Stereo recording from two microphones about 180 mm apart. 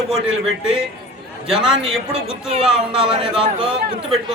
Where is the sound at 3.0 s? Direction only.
30° right (ahead or behind).